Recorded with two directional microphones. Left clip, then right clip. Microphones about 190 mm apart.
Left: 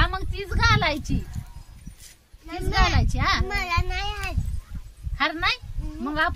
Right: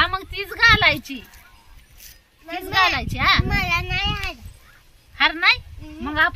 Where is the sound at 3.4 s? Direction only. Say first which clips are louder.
Right 4 dB; 30° right (ahead or behind).